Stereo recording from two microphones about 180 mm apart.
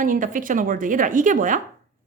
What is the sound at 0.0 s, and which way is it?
A woman's voice, 50° right (ahead or behind).